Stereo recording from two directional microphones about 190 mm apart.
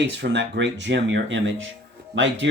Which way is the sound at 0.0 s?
65° right (ahead or behind).